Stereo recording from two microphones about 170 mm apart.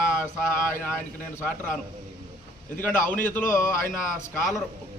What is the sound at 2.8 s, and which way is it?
A man's voice, 10° left (ahead or behind).